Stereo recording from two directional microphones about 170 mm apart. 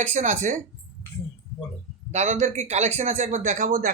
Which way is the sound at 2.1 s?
45° right (ahead or behind).